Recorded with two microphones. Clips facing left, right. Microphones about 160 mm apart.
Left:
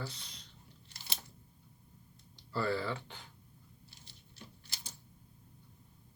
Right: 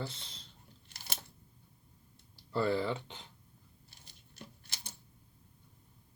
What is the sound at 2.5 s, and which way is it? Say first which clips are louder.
Speech: right 3 dB; 20° right (ahead or behind).